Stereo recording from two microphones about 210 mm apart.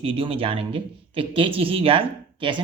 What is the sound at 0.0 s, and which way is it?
A woman's voice, 25° right (ahead or behind).